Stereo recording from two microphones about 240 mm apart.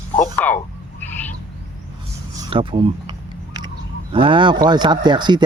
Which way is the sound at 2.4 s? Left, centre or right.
Right.